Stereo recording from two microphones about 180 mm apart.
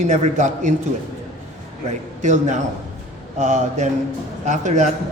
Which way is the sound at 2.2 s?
40° right (ahead or behind).